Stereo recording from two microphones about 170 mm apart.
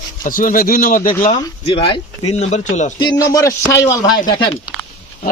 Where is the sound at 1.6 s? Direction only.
30° left (ahead or behind).